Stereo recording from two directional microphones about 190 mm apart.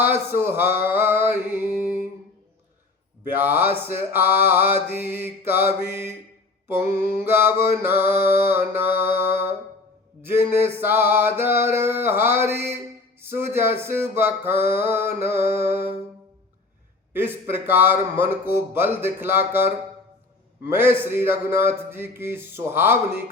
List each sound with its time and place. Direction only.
0.0 s music: 10° right (ahead or behind)
3.3 s mantra: 10° right (ahead or behind)
17.1 s mantra: 10° right (ahead or behind)
20.7 s mantra: 10° right (ahead or behind)